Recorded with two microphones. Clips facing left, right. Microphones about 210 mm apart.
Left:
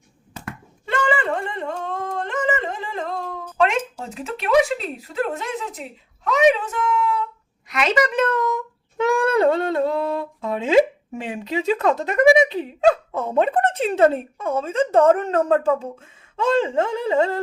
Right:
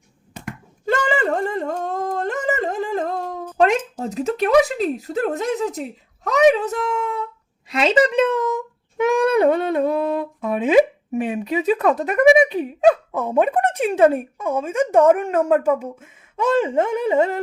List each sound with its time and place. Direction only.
0.9 s a sound: 40° right (ahead or behind)
6.2 s speech: 40° right (ahead or behind)
7.7 s speech: 30° right (ahead or behind)